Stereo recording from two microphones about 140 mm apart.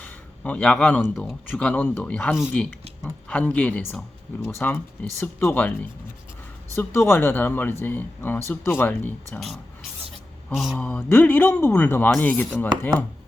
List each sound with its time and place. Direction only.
0.0 s a sound: 10° left (ahead or behind)
1.1 s speech: 5° left (ahead or behind)
2.3 s speech: 5° right (ahead or behind)
3.0 s speech: 10° left (ahead or behind)
10.5 s speech: 5° right (ahead or behind)
10.8 s speech: 10° left (ahead or behind)